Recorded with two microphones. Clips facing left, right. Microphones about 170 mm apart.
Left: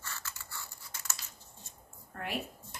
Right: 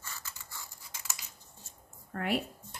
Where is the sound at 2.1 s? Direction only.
65° right (ahead or behind).